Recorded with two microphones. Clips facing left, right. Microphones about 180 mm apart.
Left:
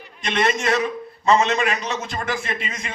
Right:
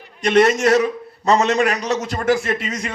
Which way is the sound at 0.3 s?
45° right (ahead or behind).